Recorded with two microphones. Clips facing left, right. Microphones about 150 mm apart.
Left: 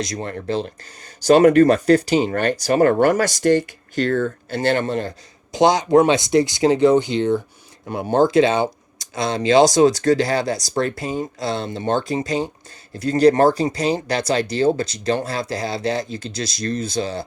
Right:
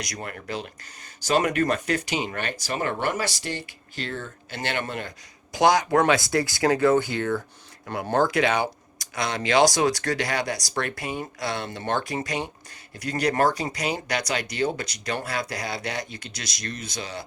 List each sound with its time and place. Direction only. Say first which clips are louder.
0.0 s speech: left 9 dB; 25° left (ahead or behind); by 4.5 s 50° left (ahead or behind)
4.5 s speech: left 9 dB; 35° left (ahead or behind)